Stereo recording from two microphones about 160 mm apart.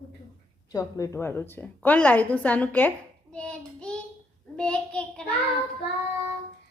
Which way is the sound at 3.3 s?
5° left (ahead or behind).